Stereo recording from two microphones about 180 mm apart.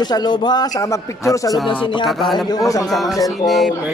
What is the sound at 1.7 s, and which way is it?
Speech, 25° left (ahead or behind).